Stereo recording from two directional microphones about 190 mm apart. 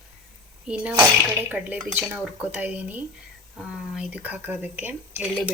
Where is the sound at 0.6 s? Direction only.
5° right (ahead or behind).